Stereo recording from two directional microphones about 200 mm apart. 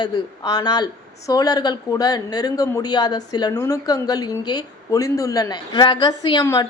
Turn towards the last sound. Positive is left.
turn(degrees=15)  # may be behind; listen again after turning